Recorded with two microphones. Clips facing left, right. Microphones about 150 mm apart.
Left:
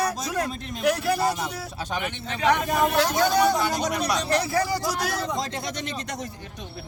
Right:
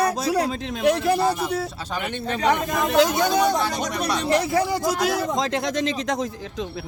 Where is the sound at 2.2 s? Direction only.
50° right (ahead or behind).